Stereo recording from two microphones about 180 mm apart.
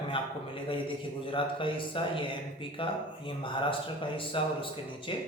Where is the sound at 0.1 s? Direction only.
30° left (ahead or behind).